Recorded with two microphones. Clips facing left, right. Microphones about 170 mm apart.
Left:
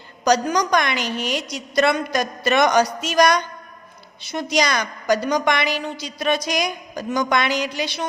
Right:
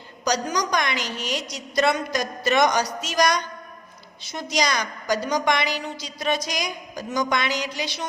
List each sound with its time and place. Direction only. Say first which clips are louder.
0.3 s a woman's voice: left 6 dB; 60° left (ahead or behind)